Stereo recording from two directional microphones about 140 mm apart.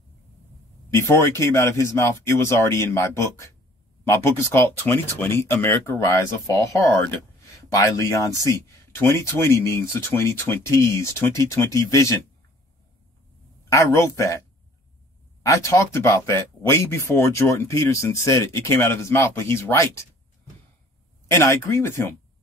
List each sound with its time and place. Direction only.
0.8 s speech: 20° left (ahead or behind)
13.7 s speech: 20° left (ahead or behind)
15.4 s speech: 20° left (ahead or behind)
21.3 s speech: 20° left (ahead or behind)